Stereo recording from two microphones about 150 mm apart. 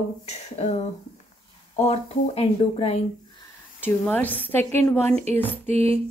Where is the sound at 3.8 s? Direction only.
10° left (ahead or behind).